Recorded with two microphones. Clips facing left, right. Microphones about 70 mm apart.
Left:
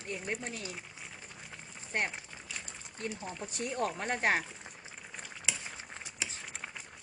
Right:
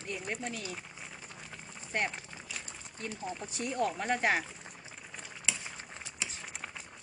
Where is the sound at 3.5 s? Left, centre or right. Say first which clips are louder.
Right 1 dB; left.